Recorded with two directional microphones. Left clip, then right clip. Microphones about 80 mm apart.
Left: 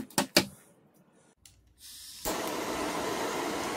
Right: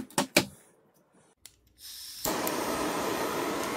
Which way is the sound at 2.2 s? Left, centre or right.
Right.